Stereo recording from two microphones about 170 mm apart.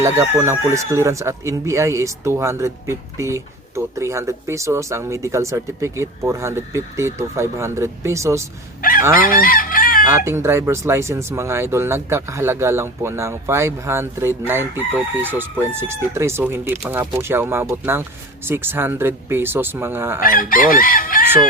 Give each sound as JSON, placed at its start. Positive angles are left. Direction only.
{"t": 0.0, "sound": "speech", "side_deg": -15}
{"t": 8.8, "sound": "fowl", "side_deg": 55}
{"t": 9.1, "sound": "chicken", "side_deg": 55}
{"t": 10.1, "sound": "speech", "side_deg": -15}
{"t": 20.2, "sound": "chicken", "side_deg": 55}